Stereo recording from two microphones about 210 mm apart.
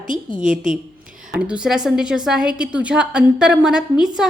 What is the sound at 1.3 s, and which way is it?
A woman's voice, 5° right (ahead or behind).